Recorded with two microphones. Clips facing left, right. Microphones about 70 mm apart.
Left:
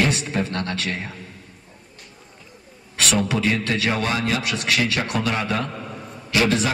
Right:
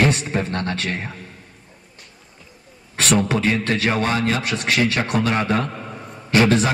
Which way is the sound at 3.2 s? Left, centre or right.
Right.